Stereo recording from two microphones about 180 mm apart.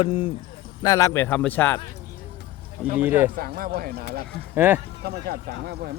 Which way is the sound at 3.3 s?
55° right (ahead or behind).